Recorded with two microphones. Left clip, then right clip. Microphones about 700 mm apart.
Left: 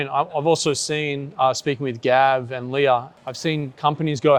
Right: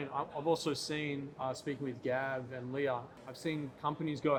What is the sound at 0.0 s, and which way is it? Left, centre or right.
A man's voice, left.